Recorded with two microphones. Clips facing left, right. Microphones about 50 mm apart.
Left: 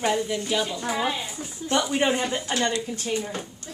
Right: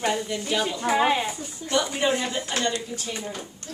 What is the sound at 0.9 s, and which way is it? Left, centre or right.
Speech, right.